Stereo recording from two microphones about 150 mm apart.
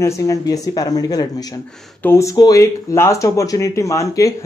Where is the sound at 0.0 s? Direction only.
20° left (ahead or behind).